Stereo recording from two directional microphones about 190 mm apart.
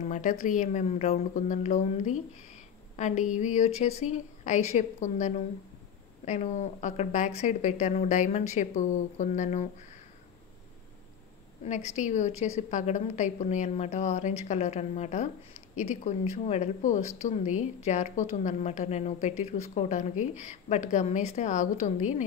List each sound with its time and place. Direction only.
0.0 s speech: 40° left (ahead or behind)
11.6 s speech: 35° left (ahead or behind)